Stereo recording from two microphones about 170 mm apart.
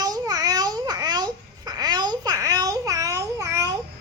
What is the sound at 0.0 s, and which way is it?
Babbling, 25° right (ahead or behind).